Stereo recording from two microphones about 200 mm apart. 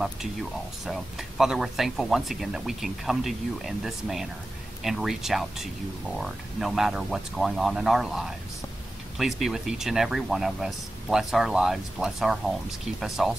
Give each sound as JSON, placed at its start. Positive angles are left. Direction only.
{"t": 0.0, "sound": "speech", "side_deg": 0}